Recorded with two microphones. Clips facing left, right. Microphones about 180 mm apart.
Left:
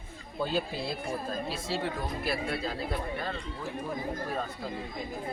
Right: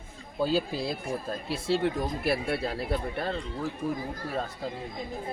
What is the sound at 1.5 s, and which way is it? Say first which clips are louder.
Speech: right 6 dB; 60° right (ahead or behind).